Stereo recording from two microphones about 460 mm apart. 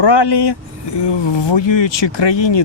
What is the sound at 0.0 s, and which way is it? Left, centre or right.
Speech, left.